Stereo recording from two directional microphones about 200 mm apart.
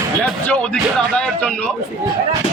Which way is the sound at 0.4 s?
5° left (ahead or behind).